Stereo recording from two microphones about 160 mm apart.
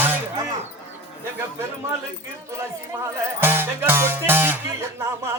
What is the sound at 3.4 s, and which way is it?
Speech, 15° right (ahead or behind).